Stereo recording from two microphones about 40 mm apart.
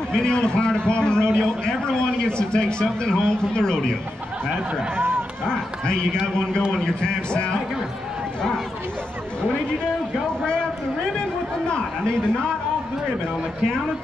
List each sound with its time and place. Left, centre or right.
0.1 s a man's voice: left
4.9 s a sound: right
5.4 s a man's voice: left
10.4 s a man's voice: left